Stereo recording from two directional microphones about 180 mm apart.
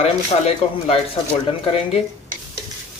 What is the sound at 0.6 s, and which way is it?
Speech, 35° left (ahead or behind).